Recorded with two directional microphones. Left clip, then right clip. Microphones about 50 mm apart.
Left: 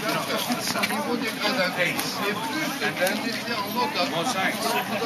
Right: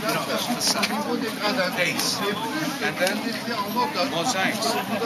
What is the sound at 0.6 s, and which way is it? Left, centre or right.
Speech, right.